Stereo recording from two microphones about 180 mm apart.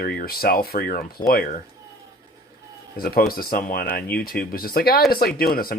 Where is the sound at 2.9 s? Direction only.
55° left (ahead or behind).